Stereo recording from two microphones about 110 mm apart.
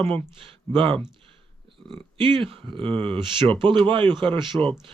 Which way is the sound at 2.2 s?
50° right (ahead or behind).